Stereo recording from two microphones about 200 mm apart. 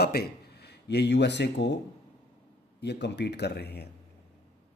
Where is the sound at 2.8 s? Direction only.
60° left (ahead or behind).